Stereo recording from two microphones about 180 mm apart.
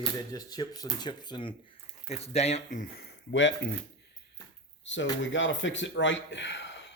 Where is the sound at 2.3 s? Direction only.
35° left (ahead or behind); by 3.7 s 80° left.